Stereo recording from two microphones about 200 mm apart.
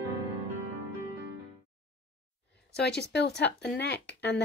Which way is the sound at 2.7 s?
55° left (ahead or behind).